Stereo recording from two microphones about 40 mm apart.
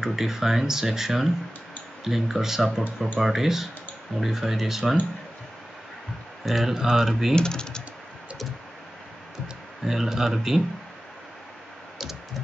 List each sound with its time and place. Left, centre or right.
0.0 s speech: centre
6.4 s speech: centre
6.7 s speech: centre
7.3 s speech: centre
9.8 s speech: centre